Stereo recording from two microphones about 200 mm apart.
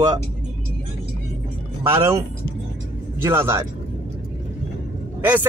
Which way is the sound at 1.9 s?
15° right (ahead or behind).